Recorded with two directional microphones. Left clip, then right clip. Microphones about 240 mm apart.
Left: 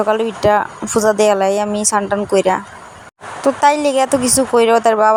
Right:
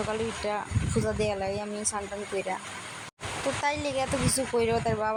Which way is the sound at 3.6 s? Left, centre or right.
Left.